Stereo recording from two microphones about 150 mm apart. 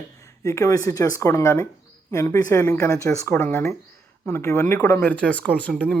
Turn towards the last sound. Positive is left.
turn(degrees=5)  # may be behind; listen again after turning